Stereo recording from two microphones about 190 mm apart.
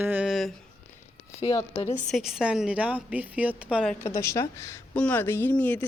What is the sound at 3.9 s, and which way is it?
A woman's voice, 10° left (ahead or behind).